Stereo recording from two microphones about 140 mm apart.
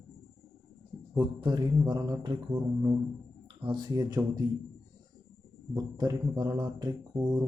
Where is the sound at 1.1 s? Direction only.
30° right (ahead or behind).